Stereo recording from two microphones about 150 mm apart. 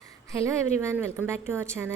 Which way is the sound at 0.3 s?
20° right (ahead or behind).